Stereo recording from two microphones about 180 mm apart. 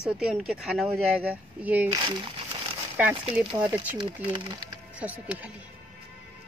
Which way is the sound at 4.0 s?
30° right (ahead or behind).